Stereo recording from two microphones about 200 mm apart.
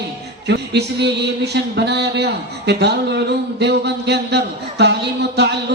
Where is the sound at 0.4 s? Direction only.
55° right (ahead or behind).